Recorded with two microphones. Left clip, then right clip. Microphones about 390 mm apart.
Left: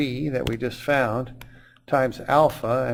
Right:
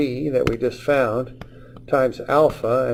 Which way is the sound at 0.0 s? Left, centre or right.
Left.